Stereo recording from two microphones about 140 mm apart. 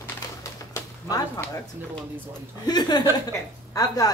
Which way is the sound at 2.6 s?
30° left (ahead or behind).